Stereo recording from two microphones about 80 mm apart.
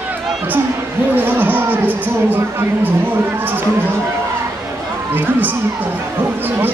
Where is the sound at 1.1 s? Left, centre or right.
Right.